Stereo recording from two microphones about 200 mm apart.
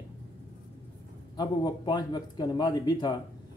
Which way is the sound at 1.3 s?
20° left (ahead or behind).